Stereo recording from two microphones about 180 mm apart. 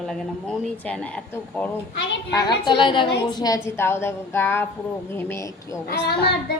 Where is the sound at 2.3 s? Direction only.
25° left (ahead or behind).